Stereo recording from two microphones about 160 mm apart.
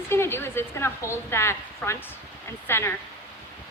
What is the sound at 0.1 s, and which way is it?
A woman's voice, 15° left (ahead or behind).